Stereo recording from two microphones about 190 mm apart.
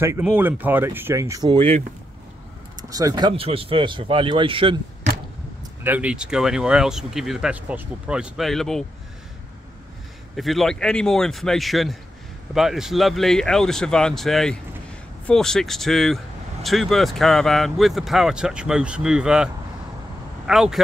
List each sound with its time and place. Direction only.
0.0 s speech: 15° right (ahead or behind)
2.8 s speech: 20° right (ahead or behind)
5.9 s speech: 5° right (ahead or behind)
10.3 s speech: centre (ahead or behind)